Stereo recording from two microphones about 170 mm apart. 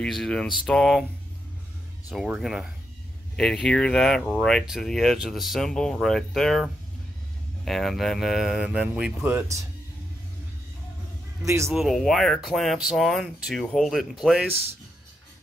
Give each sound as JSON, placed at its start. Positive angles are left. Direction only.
{"t": 0.0, "sound": "speech", "side_deg": 5}
{"t": 2.0, "sound": "speech", "side_deg": -5}
{"t": 11.4, "sound": "speech", "side_deg": -15}
{"t": 11.7, "sound": "speech", "side_deg": 0}